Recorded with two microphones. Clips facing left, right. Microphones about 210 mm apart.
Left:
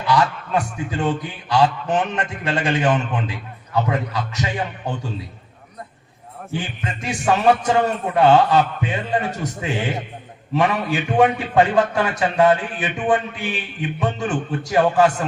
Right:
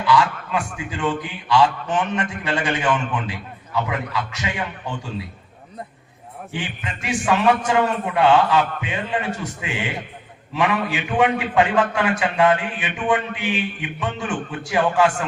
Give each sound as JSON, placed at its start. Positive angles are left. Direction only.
{"t": 0.1, "sound": "a man's voice", "side_deg": 40}
{"t": 6.5, "sound": "a man's voice", "side_deg": 40}